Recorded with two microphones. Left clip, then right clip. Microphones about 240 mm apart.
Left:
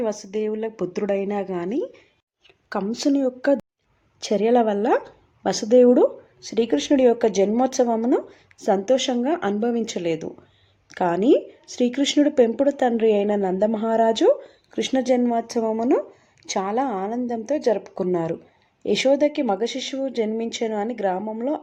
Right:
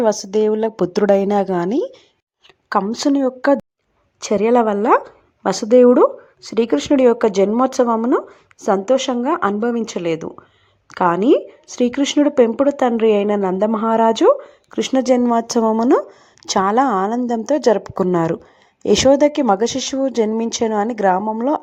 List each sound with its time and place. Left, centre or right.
0.0 s speech: right
2.6 s a woman's voice: centre